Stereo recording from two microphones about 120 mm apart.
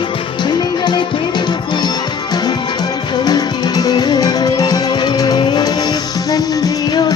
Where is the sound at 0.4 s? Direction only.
35° left (ahead or behind).